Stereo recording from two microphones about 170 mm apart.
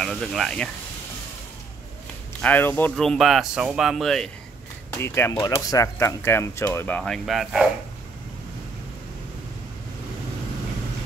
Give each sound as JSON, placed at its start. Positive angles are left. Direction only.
{"t": 0.0, "sound": "speech", "side_deg": 5}
{"t": 2.4, "sound": "speech", "side_deg": 10}
{"t": 4.9, "sound": "speech", "side_deg": 15}
{"t": 7.0, "sound": "speech", "side_deg": 0}